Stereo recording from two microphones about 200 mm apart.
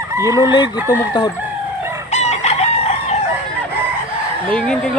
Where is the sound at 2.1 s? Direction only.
35° left (ahead or behind).